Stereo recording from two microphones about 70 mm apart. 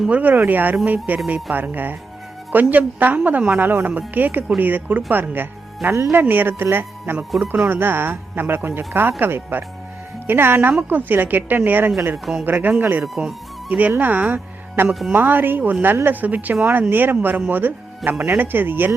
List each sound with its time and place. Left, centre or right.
0.1 s a woman's voice: right
5.9 s a woman's voice: right
12.1 s speech: centre
12.5 s a woman's voice: right